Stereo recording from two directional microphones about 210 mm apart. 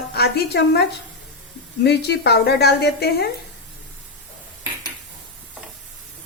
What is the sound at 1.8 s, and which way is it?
A woman's voice, 50° left (ahead or behind).